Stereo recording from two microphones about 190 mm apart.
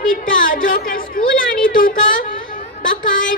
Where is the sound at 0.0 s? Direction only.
45° left (ahead or behind).